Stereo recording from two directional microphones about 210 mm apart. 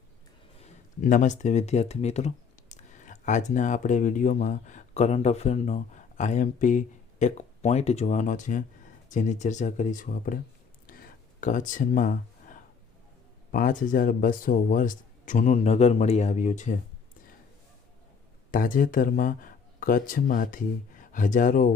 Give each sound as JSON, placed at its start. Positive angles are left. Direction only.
{"t": 0.6, "sound": "speech", "side_deg": 35}
{"t": 10.8, "sound": "a sound", "side_deg": 45}
{"t": 13.5, "sound": "speech", "side_deg": 40}
{"t": 18.5, "sound": "speech", "side_deg": 40}